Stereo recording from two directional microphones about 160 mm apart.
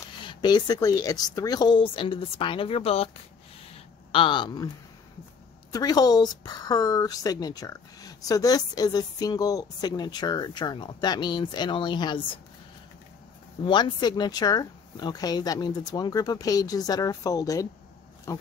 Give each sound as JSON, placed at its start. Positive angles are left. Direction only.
{"t": 0.2, "sound": "a woman's voice", "side_deg": 30}
{"t": 4.1, "sound": "speech", "side_deg": 30}
{"t": 5.7, "sound": "a woman's voice", "side_deg": 25}
{"t": 13.7, "sound": "a woman's voice", "side_deg": 30}